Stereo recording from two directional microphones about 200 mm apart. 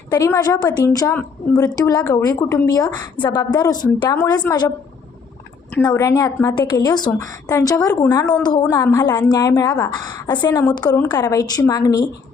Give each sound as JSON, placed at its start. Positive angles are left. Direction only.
{"t": 0.1, "sound": "a woman's voice", "side_deg": 15}
{"t": 5.8, "sound": "a woman's voice", "side_deg": 15}